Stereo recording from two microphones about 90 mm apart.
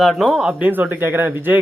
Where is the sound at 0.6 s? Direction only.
20° right (ahead or behind).